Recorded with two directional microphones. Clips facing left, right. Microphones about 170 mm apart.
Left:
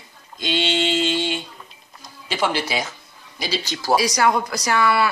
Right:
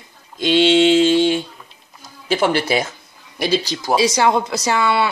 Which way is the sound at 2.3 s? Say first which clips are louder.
Right 6 dB; 55° right (ahead or behind).